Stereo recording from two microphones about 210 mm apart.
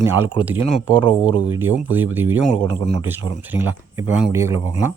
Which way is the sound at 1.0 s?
20° left (ahead or behind).